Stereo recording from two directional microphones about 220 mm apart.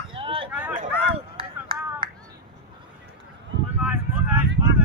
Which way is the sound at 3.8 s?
5° right (ahead or behind).